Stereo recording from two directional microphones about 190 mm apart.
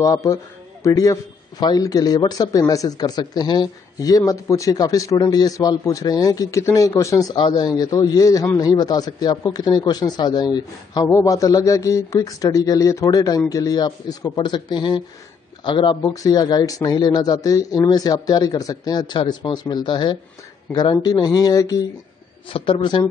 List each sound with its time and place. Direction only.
0.0 s a man's voice: 15° left (ahead or behind)